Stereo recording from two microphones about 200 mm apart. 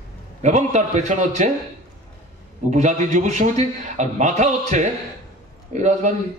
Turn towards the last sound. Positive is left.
turn(degrees=-35)  # may be behind; listen again after turning